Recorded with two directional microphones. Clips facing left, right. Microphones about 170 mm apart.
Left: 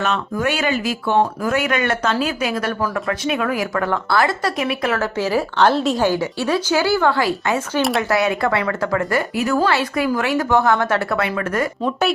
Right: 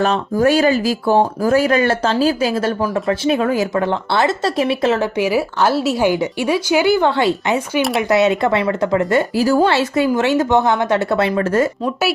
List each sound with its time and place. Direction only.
0.0 s speech: 35° right (ahead or behind)
7.8 s speech: centre (ahead or behind)
8.1 s speech: 20° right (ahead or behind)